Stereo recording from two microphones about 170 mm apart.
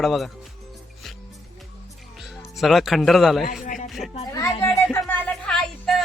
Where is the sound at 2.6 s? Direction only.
Centre (ahead or behind).